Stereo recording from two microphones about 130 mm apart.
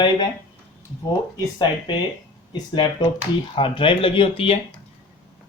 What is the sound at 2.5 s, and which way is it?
Speech, 35° left (ahead or behind).